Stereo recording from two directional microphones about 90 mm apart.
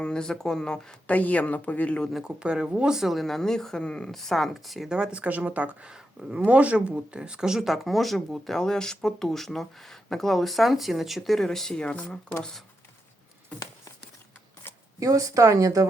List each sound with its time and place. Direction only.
0.0 s speech: 10° left (ahead or behind)
2.1 s speech: 10° right (ahead or behind); by 12.6 s 5° left (ahead or behind)
14.9 s a woman's voice: 40° right (ahead or behind)